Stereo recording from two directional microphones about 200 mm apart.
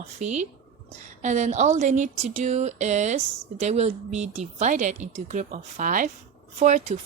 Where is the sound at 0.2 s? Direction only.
35° right (ahead or behind).